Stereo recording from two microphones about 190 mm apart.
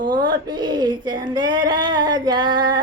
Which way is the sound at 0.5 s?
20° right (ahead or behind).